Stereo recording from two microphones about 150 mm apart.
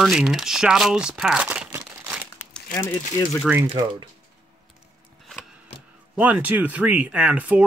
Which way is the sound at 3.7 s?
30° right (ahead or behind).